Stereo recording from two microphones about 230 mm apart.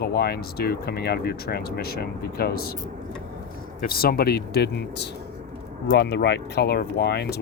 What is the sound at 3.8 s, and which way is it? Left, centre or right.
Speech, left.